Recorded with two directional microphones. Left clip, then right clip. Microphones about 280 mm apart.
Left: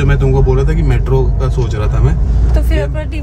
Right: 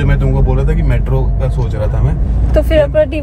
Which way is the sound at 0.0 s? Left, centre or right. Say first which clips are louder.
Left 3 dB; centre.